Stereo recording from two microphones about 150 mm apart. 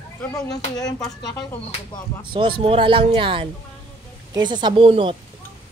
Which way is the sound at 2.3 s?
35° right (ahead or behind).